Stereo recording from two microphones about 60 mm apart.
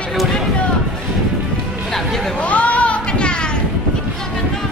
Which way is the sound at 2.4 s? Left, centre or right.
Left.